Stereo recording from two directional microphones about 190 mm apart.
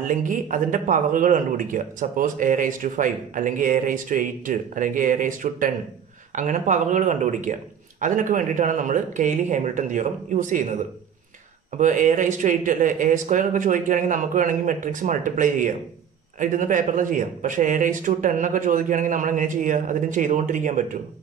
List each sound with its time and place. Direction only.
0.1 s a man's voice: 45° right (ahead or behind)
11.8 s a man's voice: 40° right (ahead or behind)